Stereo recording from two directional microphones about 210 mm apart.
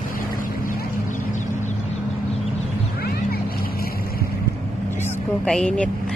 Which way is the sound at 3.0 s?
45° left (ahead or behind).